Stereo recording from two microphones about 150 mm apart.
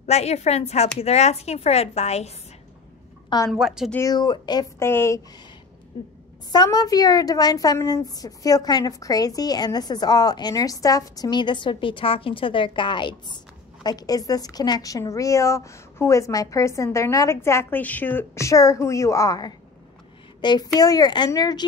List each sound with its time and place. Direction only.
0.0 s a woman's voice: 45° left (ahead or behind)
3.5 s a woman's voice: 5° right (ahead or behind)
3.9 s a woman's voice: 25° left (ahead or behind)
4.7 s a woman's voice: 15° left (ahead or behind)
6.5 s a woman's voice: 25° left (ahead or behind)